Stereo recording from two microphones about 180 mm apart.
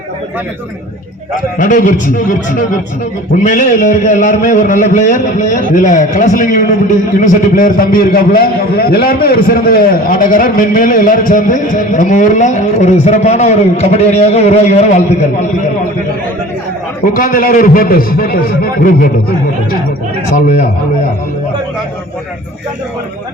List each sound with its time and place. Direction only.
1.5 s a man's voice: 45° left (ahead or behind)
17.2 s a man's voice: 50° left (ahead or behind)